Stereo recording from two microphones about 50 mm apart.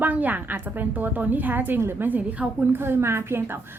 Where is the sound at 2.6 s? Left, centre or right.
Right.